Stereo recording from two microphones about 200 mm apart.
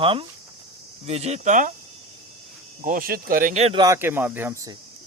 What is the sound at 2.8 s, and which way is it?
Speech, 45° right (ahead or behind).